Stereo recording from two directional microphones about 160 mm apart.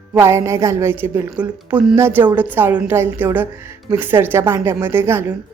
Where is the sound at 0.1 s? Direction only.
15° right (ahead or behind).